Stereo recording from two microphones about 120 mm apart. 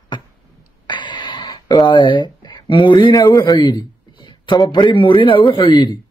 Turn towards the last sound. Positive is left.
turn(degrees=40)  # may be behind; listen again after turning